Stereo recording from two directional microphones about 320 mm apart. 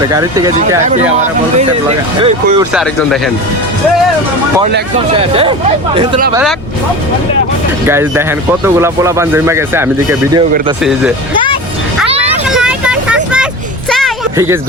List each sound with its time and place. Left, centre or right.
0.1 s speech: centre
4.9 s speech: centre
7.9 s speech: centre
12.5 s vehicle: centre
13.9 s a sound: centre